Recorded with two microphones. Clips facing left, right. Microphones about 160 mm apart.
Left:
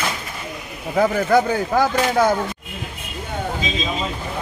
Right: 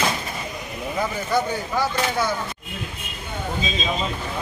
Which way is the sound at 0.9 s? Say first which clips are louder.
Left 7 dB; 65° left (ahead or behind).